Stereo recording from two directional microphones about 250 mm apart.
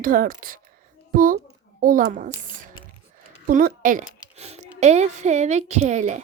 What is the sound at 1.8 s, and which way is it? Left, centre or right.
Speech, right.